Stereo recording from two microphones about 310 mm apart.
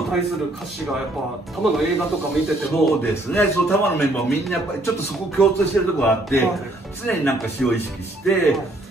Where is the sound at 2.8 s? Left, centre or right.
Centre.